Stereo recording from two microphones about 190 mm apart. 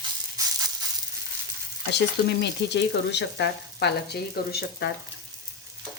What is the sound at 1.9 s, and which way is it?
Frying, 65° left (ahead or behind).